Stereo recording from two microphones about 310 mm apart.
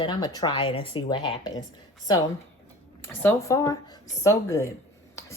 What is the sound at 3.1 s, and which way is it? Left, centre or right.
Speech, centre.